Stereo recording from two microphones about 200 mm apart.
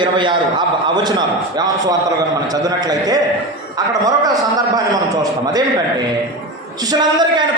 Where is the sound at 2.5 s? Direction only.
20° right (ahead or behind).